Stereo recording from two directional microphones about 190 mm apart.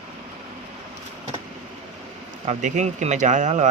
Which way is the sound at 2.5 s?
40° right (ahead or behind).